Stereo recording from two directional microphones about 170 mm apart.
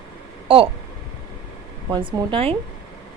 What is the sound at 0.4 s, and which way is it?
Speech, 35° right (ahead or behind).